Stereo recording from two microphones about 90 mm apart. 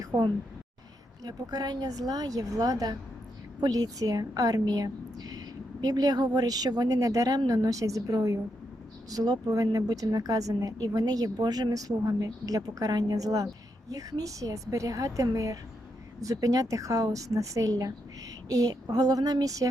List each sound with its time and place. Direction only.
0.1 s a woman's voice: 45° right (ahead or behind)